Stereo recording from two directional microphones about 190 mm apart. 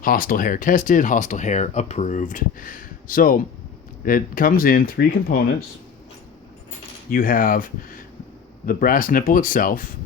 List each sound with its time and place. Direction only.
0.0 s speech: 50° left (ahead or behind)
7.1 s speech: 50° left (ahead or behind)